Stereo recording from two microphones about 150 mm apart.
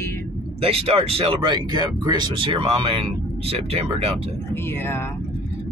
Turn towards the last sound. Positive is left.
turn(degrees=-40)  # may be behind; listen again after turning